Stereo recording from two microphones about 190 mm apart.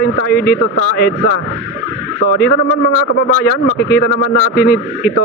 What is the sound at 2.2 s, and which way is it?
Speech, 60° left (ahead or behind).